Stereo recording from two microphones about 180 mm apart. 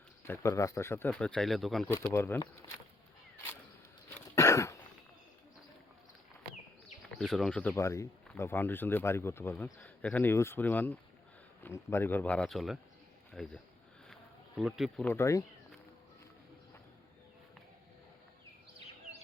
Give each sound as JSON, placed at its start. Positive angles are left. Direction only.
{"t": 0.3, "sound": "speech", "side_deg": 15}
{"t": 1.9, "sound": "speech", "side_deg": 15}
{"t": 4.4, "sound": "a sound", "side_deg": 15}
{"t": 7.2, "sound": "speech", "side_deg": 0}
{"t": 14.1, "sound": "bee", "side_deg": -5}
{"t": 15.0, "sound": "speech", "side_deg": 15}